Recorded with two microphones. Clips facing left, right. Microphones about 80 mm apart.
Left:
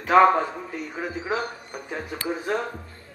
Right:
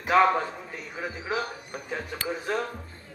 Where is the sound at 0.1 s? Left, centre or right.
Left.